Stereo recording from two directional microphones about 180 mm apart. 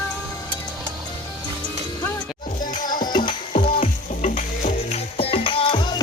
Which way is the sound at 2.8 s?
50° left (ahead or behind).